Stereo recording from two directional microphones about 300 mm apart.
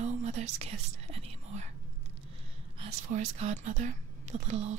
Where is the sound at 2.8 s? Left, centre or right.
Right.